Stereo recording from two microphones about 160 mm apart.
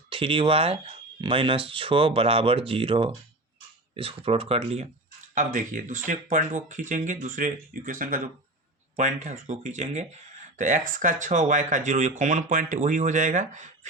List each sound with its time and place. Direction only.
0.1 s speech: 35° right (ahead or behind)
5.3 s speech: 55° right (ahead or behind)